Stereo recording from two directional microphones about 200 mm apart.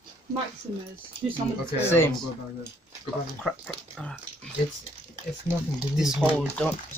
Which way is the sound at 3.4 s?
Centre (ahead or behind).